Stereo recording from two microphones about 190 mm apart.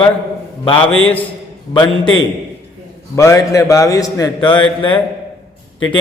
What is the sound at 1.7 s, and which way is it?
Speech, 25° left (ahead or behind).